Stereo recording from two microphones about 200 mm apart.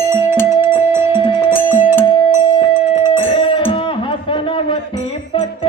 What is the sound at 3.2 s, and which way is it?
Music, 25° left (ahead or behind).